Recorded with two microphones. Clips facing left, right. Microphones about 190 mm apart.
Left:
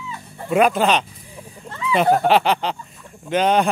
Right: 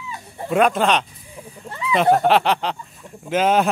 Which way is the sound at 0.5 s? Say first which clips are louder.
Left 1 dB; centre (ahead or behind).